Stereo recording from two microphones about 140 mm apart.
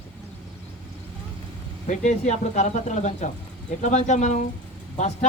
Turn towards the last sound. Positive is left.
turn(degrees=55)  # may be behind; listen again after turning